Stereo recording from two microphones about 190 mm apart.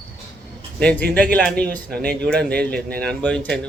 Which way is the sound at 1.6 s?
5° left (ahead or behind).